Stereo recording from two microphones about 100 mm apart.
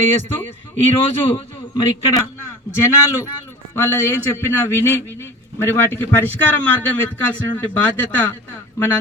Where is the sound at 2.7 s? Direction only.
25° left (ahead or behind).